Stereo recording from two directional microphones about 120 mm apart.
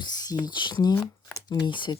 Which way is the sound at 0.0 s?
35° left (ahead or behind).